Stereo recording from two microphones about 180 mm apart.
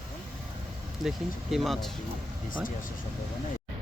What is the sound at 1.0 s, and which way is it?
Speech, centre (ahead or behind).